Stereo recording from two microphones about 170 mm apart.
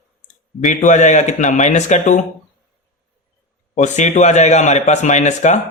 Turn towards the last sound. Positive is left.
turn(degrees=45)  # may be behind; listen again after turning